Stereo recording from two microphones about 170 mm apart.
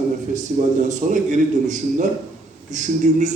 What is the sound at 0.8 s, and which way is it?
A man's voice, 45° right (ahead or behind).